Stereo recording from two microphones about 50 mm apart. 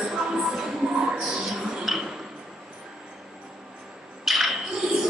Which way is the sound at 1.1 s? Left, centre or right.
Centre.